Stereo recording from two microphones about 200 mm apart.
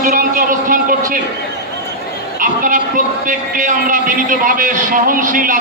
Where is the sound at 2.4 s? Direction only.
45° right (ahead or behind).